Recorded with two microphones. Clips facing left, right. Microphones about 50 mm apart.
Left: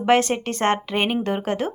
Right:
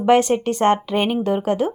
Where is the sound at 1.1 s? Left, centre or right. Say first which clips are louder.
Right 4 dB; left.